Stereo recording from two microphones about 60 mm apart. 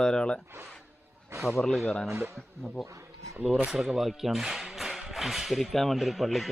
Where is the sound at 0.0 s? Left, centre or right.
Centre.